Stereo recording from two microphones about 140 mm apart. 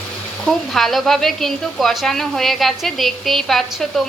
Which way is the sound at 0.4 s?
Centre (ahead or behind).